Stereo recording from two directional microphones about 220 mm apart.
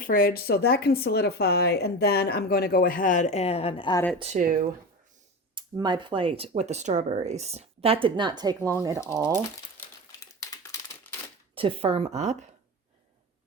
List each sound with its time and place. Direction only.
0.0 s speech: 40° left (ahead or behind); by 4.0 s 20° left (ahead or behind)
4.2 s speech: 35° right (ahead or behind)
5.5 s speech: 20° right (ahead or behind)
9.2 s crumpling: 10° left (ahead or behind)
11.5 s speech: 25° right (ahead or behind)